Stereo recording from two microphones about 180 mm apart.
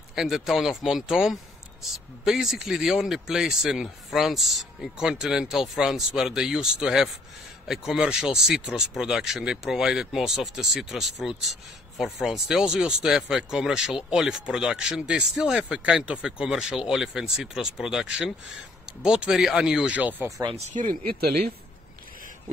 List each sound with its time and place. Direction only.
0.1 s a man's voice: centre (ahead or behind); by 20.5 s 20° right (ahead or behind)
20.5 s speech: 40° right (ahead or behind)
21.0 s speech: 55° right (ahead or behind)